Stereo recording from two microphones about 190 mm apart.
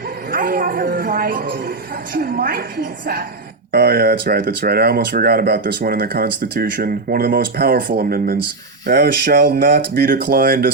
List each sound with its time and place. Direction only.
0.3 s speech: 45° right (ahead or behind)